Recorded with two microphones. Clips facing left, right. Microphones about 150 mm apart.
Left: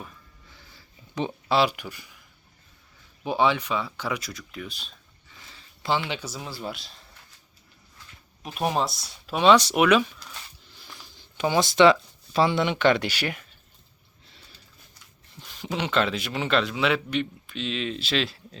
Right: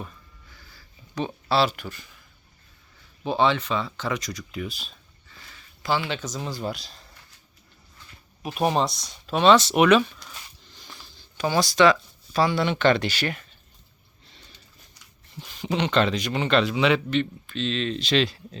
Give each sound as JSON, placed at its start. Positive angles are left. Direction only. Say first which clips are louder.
{"t": 0.5, "sound": "a sound", "louder": "left 1 dB", "side_deg": 20}
{"t": 1.5, "sound": "speech", "louder": "even", "side_deg": 15}
{"t": 3.2, "sound": "speech", "louder": "right 1 dB", "side_deg": 10}
{"t": 5.5, "sound": "a sound", "louder": "even", "side_deg": 25}
{"t": 6.1, "sound": "speech", "louder": "right 3 dB", "side_deg": 10}
{"t": 8.4, "sound": "speech", "louder": "right 3 dB", "side_deg": -5}
{"t": 10.7, "sound": "a sound", "louder": "right 1 dB", "side_deg": 5}
{"t": 11.3, "sound": "speech", "louder": "left 1 dB", "side_deg": 20}
{"t": 15.4, "sound": "speech", "louder": "right 4 dB", "side_deg": 0}
{"t": 17.1, "sound": "speech", "louder": "right 3 dB", "side_deg": 10}